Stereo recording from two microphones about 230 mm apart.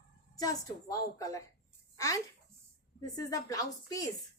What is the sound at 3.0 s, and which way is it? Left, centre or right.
A woman's voice, centre.